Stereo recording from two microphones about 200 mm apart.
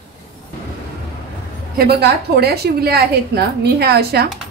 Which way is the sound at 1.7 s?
55° right (ahead or behind).